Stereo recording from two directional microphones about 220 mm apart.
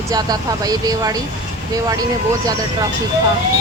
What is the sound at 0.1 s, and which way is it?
Speech, 15° right (ahead or behind).